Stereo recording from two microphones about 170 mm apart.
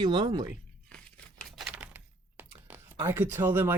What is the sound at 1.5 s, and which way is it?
Typing, centre (ahead or behind).